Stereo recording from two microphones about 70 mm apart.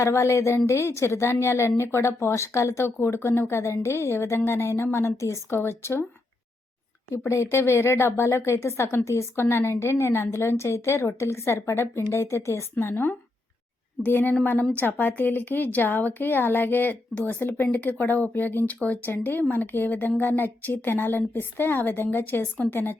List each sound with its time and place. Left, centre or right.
0.0 s speech: left
7.3 s speech: left
12.7 s speech: left